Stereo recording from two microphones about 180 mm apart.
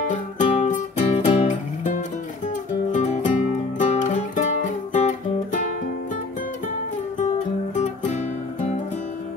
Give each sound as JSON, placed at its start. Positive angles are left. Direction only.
{"t": 0.0, "sound": "music", "side_deg": 45}
{"t": 7.7, "sound": "music", "side_deg": 40}